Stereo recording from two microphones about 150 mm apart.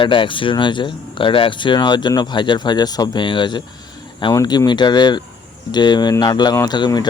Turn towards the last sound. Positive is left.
turn(degrees=30)  # may be behind; listen again after turning